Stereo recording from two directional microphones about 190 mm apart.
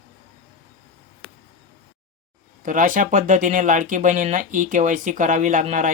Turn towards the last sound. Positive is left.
turn(degrees=-45)  # may be behind; listen again after turning